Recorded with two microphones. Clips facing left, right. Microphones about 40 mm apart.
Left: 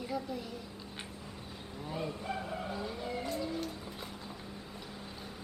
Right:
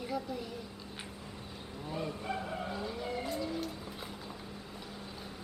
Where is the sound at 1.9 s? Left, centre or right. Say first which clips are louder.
Even; centre.